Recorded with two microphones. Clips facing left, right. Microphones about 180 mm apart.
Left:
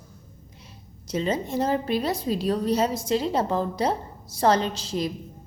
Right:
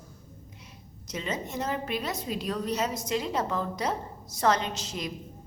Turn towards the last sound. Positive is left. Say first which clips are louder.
# left 7 dB
turn(degrees=30)  # may be behind; listen again after turning